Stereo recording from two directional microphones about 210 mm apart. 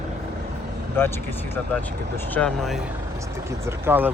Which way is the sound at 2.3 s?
5° left (ahead or behind).